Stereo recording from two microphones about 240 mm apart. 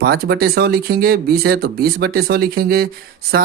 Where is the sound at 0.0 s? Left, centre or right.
Right.